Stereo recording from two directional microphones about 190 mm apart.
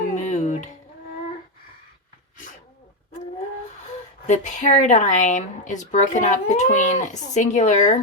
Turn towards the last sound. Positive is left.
turn(degrees=40)  # may be behind; listen again after turning